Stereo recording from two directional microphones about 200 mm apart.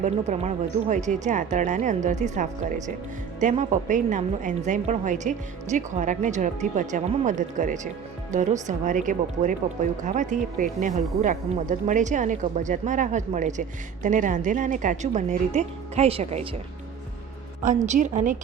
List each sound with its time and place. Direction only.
0.0 s a woman's voice: 35° right (ahead or behind)
17.6 s a woman's voice: 40° right (ahead or behind)